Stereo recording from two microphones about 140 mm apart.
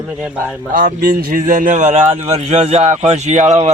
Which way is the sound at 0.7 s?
70° right (ahead or behind).